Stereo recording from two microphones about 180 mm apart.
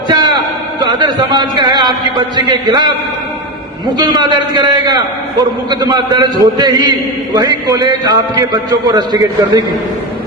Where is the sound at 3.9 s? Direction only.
25° right (ahead or behind).